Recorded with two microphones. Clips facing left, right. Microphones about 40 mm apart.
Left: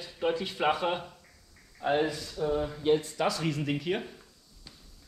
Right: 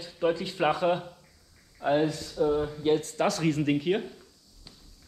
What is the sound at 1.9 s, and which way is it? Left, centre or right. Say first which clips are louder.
Speech: right 2 dB; centre.